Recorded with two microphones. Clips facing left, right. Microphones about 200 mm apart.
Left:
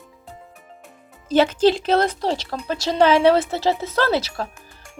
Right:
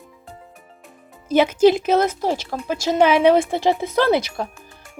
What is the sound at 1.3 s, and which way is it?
A woman's voice, 10° right (ahead or behind).